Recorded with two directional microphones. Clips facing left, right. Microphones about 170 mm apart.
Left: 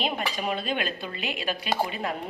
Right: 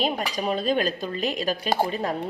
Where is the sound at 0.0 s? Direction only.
40° right (ahead or behind).